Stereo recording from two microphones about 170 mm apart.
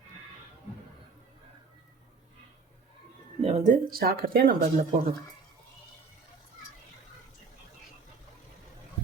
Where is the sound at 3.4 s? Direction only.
45° right (ahead or behind).